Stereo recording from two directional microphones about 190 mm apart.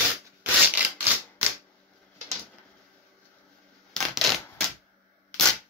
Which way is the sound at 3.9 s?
Centre (ahead or behind).